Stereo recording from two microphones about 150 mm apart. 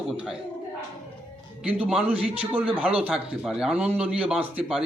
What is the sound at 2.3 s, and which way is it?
Speech, 40° right (ahead or behind).